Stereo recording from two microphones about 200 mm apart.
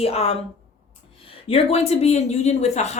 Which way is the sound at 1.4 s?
30° left (ahead or behind).